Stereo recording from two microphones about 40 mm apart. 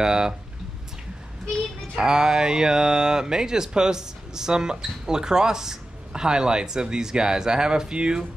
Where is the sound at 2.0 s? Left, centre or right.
Centre.